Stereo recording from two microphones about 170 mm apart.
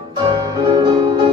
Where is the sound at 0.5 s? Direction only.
30° right (ahead or behind).